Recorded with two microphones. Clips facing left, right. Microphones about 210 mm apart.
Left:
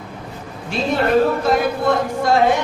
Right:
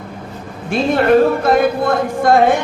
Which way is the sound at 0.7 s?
50° right (ahead or behind).